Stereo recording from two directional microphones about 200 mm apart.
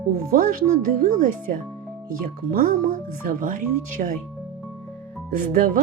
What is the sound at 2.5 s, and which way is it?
Speech, 45° right (ahead or behind).